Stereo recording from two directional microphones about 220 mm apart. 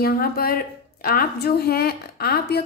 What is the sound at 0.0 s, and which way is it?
A woman's voice, 45° left (ahead or behind).